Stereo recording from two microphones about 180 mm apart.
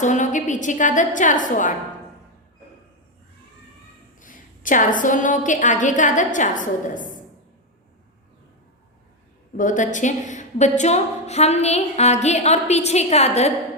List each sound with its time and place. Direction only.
0.0 s a woman's voice: 45° left (ahead or behind)
4.2 s a woman's voice: 45° left (ahead or behind)
9.6 s a woman's voice: 45° left (ahead or behind)